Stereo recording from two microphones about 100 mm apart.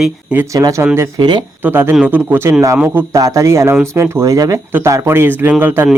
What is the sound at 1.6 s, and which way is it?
Speech, 25° right (ahead or behind).